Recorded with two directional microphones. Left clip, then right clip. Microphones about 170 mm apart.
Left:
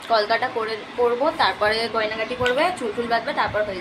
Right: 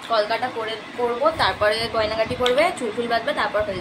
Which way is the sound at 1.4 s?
10° left (ahead or behind).